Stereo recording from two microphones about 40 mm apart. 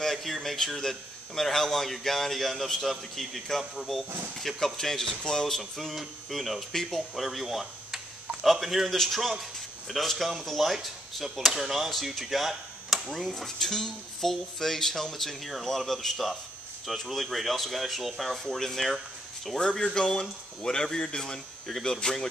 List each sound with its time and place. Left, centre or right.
0.0 s speech: centre
5.9 s speech: centre
6.7 s speech: centre
7.2 s speech: centre